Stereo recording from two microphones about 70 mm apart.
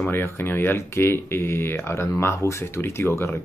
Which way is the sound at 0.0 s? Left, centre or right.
Left.